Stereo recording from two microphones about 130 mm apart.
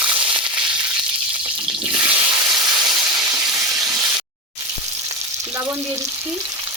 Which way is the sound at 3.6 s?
25° right (ahead or behind).